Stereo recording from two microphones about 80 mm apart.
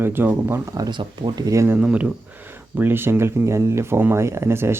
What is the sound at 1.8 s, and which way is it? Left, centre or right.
Speech, centre.